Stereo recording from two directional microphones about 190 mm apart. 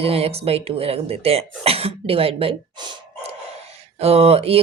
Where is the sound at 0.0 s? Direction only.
30° right (ahead or behind).